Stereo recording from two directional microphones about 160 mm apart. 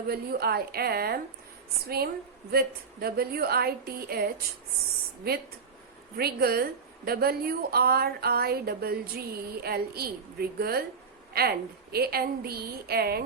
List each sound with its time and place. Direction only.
0.1 s a woman's voice: 75° right (ahead or behind)
2.5 s a woman's voice: 75° right (ahead or behind)